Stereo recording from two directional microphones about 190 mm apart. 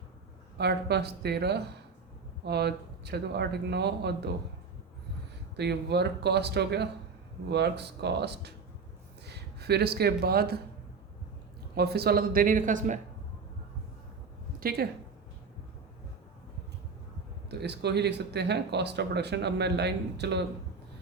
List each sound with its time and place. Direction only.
0.6 s speech: 60° right (ahead or behind)
5.5 s speech: 60° right (ahead or behind)
11.7 s speech: 60° right (ahead or behind)
14.6 s speech: 55° right (ahead or behind)
17.5 s speech: 60° right (ahead or behind)